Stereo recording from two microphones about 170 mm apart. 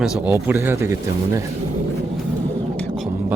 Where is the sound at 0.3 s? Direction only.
15° right (ahead or behind).